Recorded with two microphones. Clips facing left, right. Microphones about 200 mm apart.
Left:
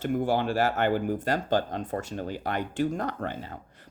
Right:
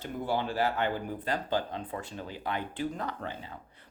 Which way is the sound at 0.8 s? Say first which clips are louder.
Left 6 dB; 80° left.